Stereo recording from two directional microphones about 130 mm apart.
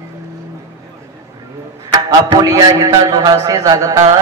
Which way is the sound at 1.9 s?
30° right (ahead or behind).